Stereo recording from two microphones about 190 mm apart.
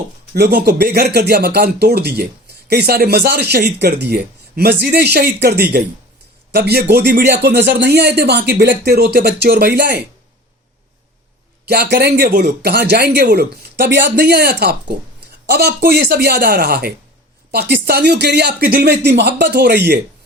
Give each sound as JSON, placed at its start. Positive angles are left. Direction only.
{"t": 0.3, "sound": "speech", "side_deg": -55}
{"t": 11.7, "sound": "speech", "side_deg": -60}